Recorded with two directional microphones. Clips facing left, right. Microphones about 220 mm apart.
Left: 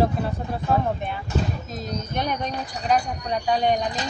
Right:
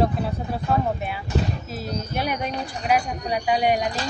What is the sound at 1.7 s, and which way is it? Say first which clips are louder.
Speech: right 1 dB; 5° right (ahead or behind).